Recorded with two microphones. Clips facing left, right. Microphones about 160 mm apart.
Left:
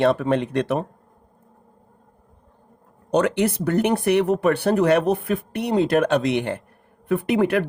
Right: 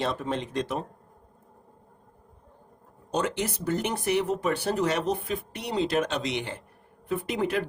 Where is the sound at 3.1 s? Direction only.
65° left (ahead or behind).